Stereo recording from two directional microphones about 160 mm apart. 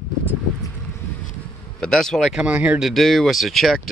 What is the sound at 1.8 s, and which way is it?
Speech, 5° left (ahead or behind).